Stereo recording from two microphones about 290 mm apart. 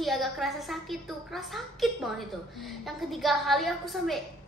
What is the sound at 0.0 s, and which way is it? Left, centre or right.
A woman's voice, centre.